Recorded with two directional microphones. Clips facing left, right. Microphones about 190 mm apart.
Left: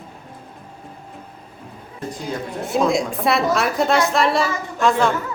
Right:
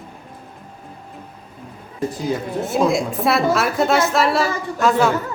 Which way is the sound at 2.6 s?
Centre (ahead or behind).